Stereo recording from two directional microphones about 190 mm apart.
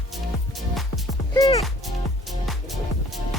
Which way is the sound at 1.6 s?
Centre (ahead or behind).